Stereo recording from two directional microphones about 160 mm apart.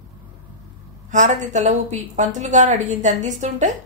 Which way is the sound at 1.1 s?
50° right (ahead or behind).